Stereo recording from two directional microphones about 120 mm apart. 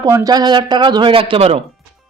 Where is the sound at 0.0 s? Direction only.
35° right (ahead or behind).